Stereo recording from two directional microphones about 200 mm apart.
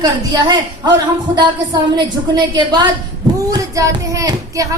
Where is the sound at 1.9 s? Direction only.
20° right (ahead or behind).